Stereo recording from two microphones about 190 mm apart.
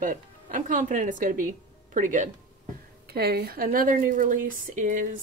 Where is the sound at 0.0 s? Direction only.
45° right (ahead or behind).